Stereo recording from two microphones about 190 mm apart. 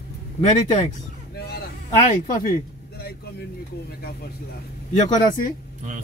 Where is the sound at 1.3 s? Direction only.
55° left (ahead or behind).